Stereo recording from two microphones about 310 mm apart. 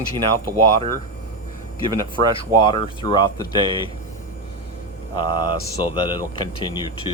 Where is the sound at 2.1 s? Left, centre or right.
Centre.